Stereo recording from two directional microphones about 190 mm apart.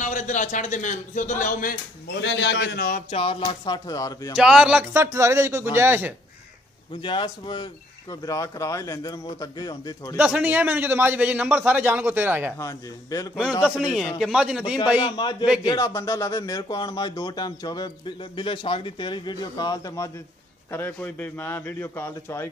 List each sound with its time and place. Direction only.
0.0 s a man's voice: 40° left (ahead or behind)
2.1 s a man's voice: 70° left (ahead or behind)
2.9 s speech: 30° left (ahead or behind)
4.4 s a man's voice: 5° right (ahead or behind)
7.0 s speech: 25° left (ahead or behind)
10.1 s a man's voice: 5° right (ahead or behind)
12.5 s a man's voice: 15° left (ahead or behind)
13.4 s a man's voice: 5° right (ahead or behind)
15.0 s a man's voice: 25° left (ahead or behind)